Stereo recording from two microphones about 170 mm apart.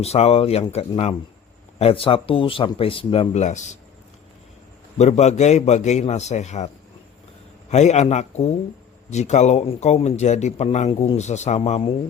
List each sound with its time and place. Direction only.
0.0 s speech: 40° left (ahead or behind)
4.9 s speech: 40° left (ahead or behind)
7.7 s speech: 40° left (ahead or behind)